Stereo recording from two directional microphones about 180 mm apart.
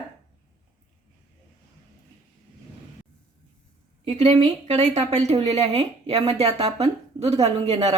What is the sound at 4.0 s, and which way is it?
Speech, 35° right (ahead or behind).